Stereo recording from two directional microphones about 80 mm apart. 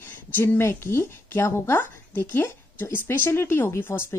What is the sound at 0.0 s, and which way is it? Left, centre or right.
Speech, left.